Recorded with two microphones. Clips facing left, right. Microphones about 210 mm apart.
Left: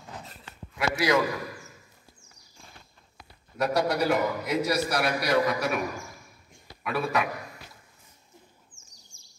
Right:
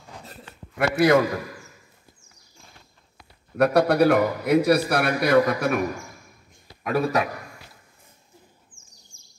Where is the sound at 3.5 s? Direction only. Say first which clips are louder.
Right 7 dB; 60° right (ahead or behind).